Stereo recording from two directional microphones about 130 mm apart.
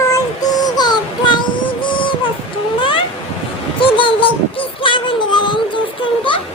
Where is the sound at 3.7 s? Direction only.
45° left (ahead or behind).